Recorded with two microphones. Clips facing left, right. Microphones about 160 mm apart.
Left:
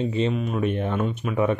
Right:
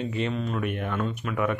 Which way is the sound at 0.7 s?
25° left (ahead or behind).